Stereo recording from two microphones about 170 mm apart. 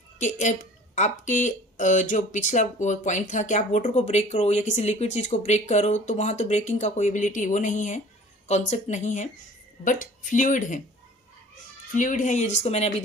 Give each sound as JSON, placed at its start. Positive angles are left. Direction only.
{"t": 0.2, "sound": "speech", "side_deg": 45}
{"t": 11.9, "sound": "speech", "side_deg": 50}